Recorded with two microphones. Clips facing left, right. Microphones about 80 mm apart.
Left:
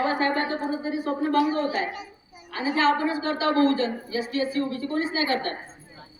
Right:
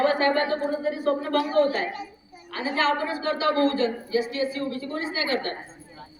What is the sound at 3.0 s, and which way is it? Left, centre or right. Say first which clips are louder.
Speech: left 3 dB; left.